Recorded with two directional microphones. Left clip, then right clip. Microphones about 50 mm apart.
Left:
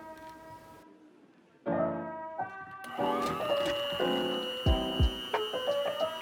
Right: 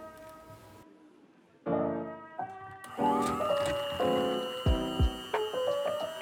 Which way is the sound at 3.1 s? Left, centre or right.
Centre.